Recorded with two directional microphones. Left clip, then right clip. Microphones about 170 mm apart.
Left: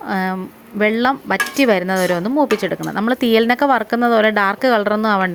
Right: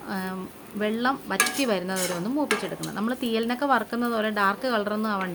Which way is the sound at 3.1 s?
45° left (ahead or behind).